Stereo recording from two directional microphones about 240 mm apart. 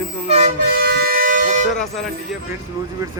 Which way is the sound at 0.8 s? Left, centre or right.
Right.